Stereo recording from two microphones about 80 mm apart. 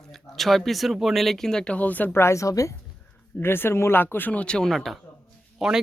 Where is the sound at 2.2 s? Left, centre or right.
Left.